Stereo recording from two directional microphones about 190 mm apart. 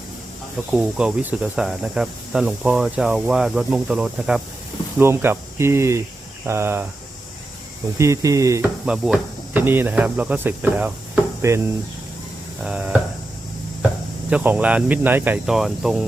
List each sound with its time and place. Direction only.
0.7 s speech: 5° right (ahead or behind)
7.9 s speech: 15° right (ahead or behind)
8.9 s speech: 5° right (ahead or behind)
12.6 s speech: 5° right (ahead or behind)
14.3 s speech: 5° right (ahead or behind)